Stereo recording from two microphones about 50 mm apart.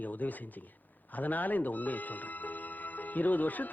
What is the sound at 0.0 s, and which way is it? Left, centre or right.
Speech, left.